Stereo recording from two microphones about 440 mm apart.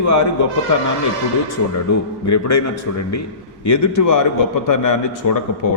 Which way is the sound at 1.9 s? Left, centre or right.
Left.